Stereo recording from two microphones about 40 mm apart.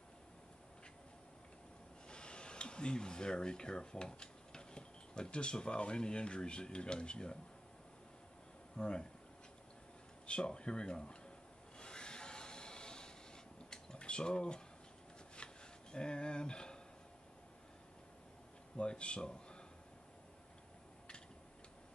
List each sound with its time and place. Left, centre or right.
2.0 s speech: left
8.7 s speech: left
10.2 s speech: left
11.8 s rub: left
13.7 s a sound: left
18.8 s a man's voice: left